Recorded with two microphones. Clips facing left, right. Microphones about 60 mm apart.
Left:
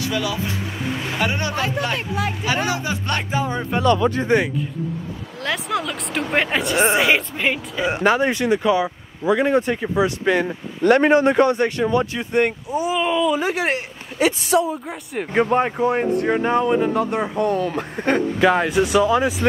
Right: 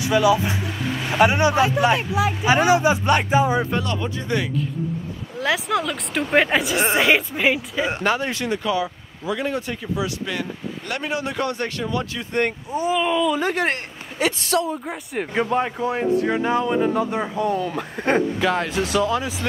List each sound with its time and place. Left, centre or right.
0.0 s speech: centre
2.4 s speech: centre
4.2 s speech: left
5.4 s a woman's voice: centre
7.9 s speech: centre
10.8 s speech: left
11.4 s speech: left
12.4 s a woman's voice: centre
18.4 s speech: centre